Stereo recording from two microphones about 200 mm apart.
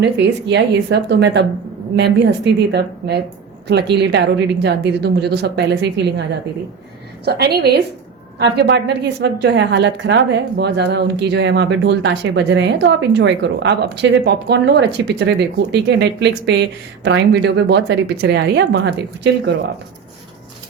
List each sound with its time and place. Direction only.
0.0 s a woman's voice: 60° right (ahead or behind)
7.3 s a woman's voice: 55° right (ahead or behind)